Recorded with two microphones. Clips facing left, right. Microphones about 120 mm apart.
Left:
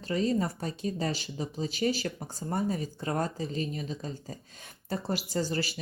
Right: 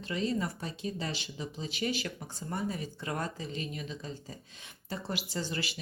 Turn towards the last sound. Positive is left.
turn(degrees=40)  # may be behind; listen again after turning